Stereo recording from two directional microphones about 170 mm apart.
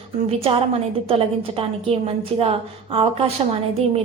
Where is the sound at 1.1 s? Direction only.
35° right (ahead or behind).